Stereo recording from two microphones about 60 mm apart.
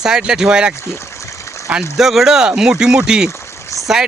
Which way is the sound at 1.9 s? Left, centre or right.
Centre.